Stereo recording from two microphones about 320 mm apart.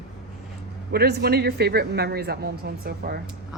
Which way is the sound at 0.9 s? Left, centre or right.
Right.